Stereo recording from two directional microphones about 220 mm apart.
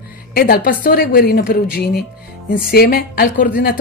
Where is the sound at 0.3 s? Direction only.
45° left (ahead or behind).